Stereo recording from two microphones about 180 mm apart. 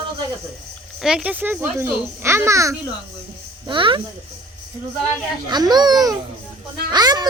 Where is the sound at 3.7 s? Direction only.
25° right (ahead or behind).